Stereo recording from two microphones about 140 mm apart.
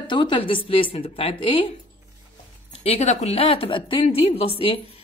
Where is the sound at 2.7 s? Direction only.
45° left (ahead or behind).